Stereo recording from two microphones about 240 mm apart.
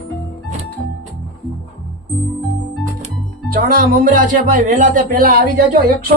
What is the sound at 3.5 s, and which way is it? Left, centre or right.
Speech, right.